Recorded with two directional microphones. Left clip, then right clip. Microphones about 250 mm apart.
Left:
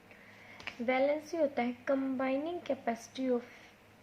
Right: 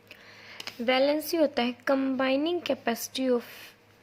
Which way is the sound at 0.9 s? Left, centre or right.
Right.